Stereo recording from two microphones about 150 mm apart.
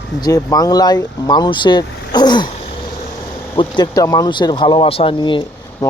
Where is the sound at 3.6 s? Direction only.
25° left (ahead or behind).